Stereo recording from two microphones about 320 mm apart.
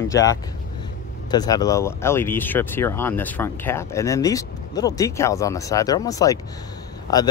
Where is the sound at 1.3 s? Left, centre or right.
Centre.